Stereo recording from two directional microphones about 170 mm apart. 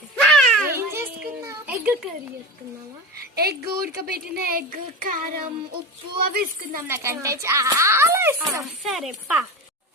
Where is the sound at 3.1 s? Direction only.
65° right (ahead or behind).